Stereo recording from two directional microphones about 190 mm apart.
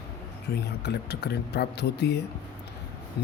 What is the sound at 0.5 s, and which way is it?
Speech, 60° left (ahead or behind).